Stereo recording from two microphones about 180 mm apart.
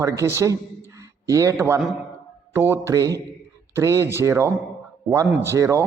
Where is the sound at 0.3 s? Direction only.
15° right (ahead or behind).